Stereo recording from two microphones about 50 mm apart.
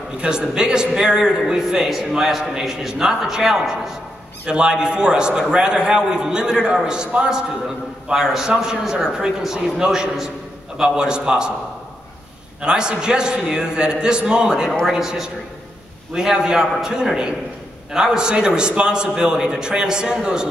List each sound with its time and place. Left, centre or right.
0.2 s a man's voice: centre
12.6 s a man's voice: centre